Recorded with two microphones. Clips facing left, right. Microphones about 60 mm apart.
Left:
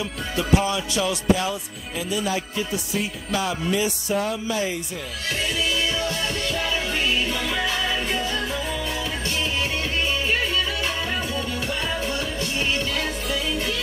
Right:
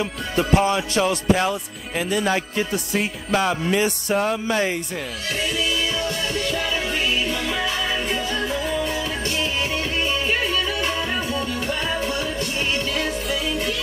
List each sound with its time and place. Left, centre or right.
0.0 s music: right
1.3 s music: right
6.3 s music: right
6.6 s music: centre
8.6 s music: right
10.0 s music: centre
11.3 s music: right